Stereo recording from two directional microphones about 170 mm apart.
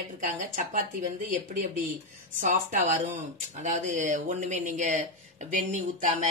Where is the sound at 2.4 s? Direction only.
45° right (ahead or behind).